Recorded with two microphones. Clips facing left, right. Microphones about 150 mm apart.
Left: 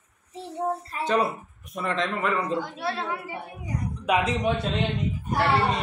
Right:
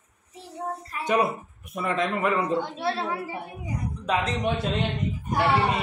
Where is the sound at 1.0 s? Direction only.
10° right (ahead or behind).